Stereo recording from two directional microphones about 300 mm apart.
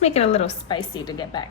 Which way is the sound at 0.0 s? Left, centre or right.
Left.